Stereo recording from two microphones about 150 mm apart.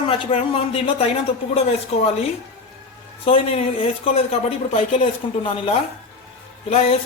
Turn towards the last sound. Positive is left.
turn(degrees=40)  # may be behind; listen again after turning